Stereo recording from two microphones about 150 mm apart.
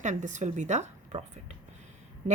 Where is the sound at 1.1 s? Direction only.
35° right (ahead or behind).